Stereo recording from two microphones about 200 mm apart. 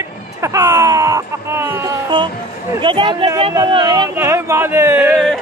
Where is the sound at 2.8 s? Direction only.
25° right (ahead or behind).